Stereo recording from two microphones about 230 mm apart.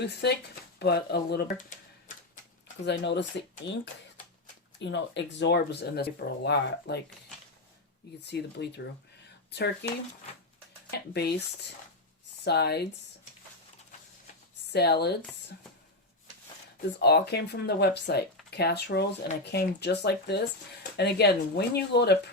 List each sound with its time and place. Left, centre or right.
0.0 s speech: left
2.8 s speech: left
4.8 s speech: left
8.3 s speech: left
11.1 s speech: left
12.5 s speech: left
14.7 s speech: left
17.0 s speech: left